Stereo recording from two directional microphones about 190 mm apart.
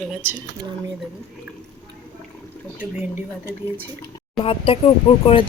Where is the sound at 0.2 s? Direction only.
10° right (ahead or behind).